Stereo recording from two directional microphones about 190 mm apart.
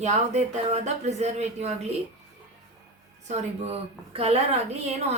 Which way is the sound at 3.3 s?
35° right (ahead or behind).